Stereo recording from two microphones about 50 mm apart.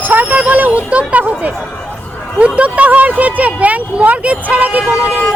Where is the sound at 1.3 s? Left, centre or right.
Right.